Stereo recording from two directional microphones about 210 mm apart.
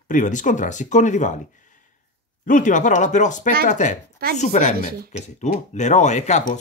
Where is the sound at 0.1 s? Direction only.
35° left (ahead or behind).